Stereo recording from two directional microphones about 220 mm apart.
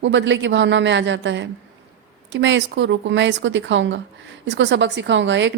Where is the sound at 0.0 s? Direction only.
55° right (ahead or behind).